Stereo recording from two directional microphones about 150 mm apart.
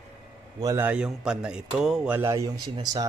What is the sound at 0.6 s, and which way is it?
Speech, 20° right (ahead or behind).